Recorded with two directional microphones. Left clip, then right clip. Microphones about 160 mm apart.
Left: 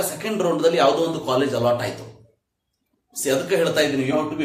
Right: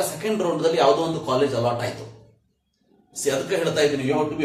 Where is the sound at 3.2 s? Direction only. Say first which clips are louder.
Left 3 dB; 15° left (ahead or behind).